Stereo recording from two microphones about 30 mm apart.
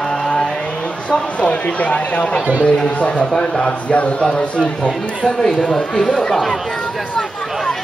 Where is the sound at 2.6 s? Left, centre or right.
Left.